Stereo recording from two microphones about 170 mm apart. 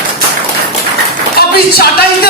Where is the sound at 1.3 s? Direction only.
65° left (ahead or behind).